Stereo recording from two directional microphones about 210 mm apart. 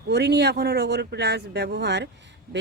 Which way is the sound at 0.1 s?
50° right (ahead or behind).